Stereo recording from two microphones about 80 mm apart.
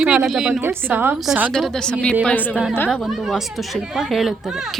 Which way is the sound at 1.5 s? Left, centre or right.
Centre.